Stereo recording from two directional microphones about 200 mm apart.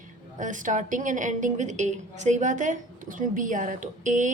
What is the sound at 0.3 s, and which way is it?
A woman's voice, 40° right (ahead or behind).